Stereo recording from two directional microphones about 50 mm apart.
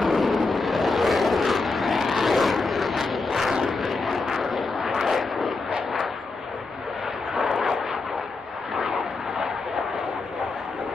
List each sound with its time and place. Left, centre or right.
0.0 s vehicle: centre
7.3 s vehicle: centre
8.7 s vehicle: right